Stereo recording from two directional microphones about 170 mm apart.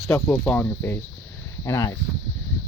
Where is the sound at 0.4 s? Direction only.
10° left (ahead or behind).